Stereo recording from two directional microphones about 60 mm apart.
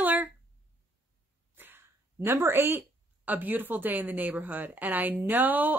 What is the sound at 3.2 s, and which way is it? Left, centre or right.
A woman's voice, right.